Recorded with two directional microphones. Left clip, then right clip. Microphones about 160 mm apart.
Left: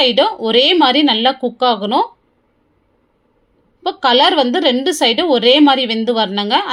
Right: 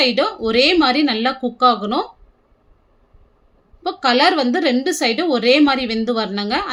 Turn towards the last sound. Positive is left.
turn(degrees=10)  # may be behind; listen again after turning